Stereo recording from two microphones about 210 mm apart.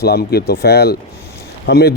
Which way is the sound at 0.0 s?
50° left (ahead or behind).